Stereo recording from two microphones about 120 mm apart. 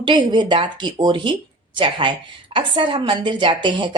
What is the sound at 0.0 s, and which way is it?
A woman's voice, 40° right (ahead or behind).